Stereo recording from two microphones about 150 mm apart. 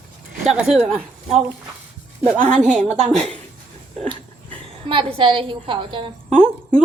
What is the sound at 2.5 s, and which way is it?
Speech, 5° left (ahead or behind).